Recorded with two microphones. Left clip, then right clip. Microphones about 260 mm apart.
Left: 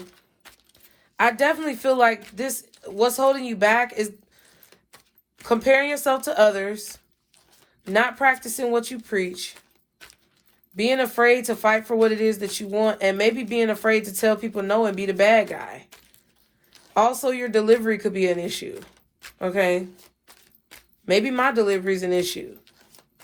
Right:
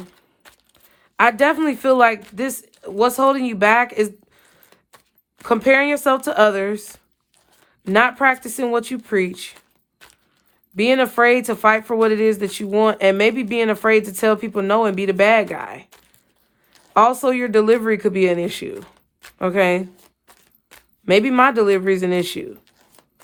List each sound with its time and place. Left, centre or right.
1.1 s speech: right
5.5 s speech: right
8.1 s speech: right
9.6 s a sound: centre
10.8 s speech: right
16.9 s speech: right
20.2 s a sound: centre
21.0 s speech: right